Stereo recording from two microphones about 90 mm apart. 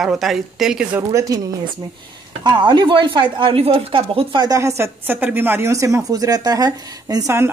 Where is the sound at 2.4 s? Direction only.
55° right (ahead or behind); by 4.4 s 85° right.